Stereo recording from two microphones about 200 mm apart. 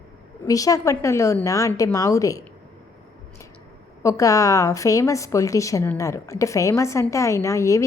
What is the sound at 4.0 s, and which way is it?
A woman's voice, 15° left (ahead or behind).